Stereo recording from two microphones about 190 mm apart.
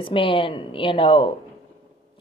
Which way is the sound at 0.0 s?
25° left (ahead or behind).